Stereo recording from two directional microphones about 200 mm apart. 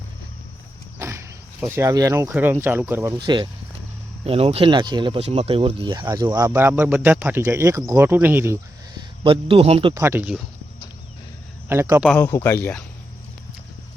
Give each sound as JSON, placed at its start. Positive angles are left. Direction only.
{"t": 0.9, "sound": "wild animals", "side_deg": -15}
{"t": 2.3, "sound": "speech", "side_deg": -10}
{"t": 3.2, "sound": "speech", "side_deg": -25}
{"t": 9.0, "sound": "speech", "side_deg": -25}
{"t": 9.9, "sound": "speech", "side_deg": -10}
{"t": 11.7, "sound": "speech", "side_deg": -10}
{"t": 12.0, "sound": "speech", "side_deg": 10}